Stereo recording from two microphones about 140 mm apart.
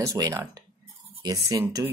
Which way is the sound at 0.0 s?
20° right (ahead or behind).